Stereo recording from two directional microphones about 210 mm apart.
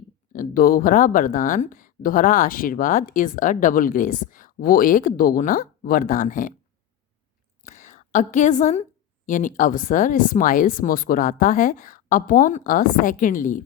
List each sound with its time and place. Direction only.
0.3 s speech: 40° left (ahead or behind)
7.6 s speech: 35° left (ahead or behind)